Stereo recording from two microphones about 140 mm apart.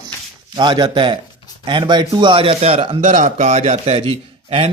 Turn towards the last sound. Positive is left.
turn(degrees=-45)  # may be behind; listen again after turning